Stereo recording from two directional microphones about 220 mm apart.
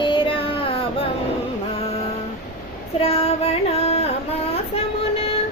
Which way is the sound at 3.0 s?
25° left (ahead or behind).